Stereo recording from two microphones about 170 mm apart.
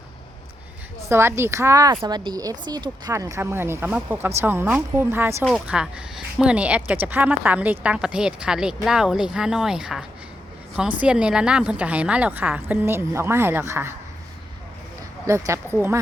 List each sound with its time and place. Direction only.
1.1 s a woman's voice: 15° right (ahead or behind)
15.3 s a woman's voice: 15° right (ahead or behind)